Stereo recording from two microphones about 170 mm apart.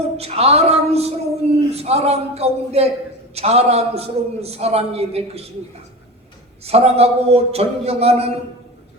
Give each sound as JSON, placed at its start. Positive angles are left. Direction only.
{"t": 0.0, "sound": "a man's voice", "side_deg": -40}
{"t": 6.7, "sound": "a man's voice", "side_deg": -35}